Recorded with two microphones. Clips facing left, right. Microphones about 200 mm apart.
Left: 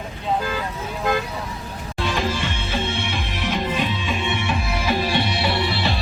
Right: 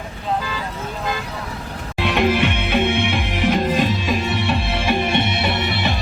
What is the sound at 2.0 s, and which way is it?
Music, 65° right (ahead or behind).